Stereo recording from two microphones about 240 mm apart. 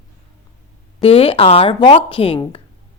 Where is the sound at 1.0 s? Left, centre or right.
Left.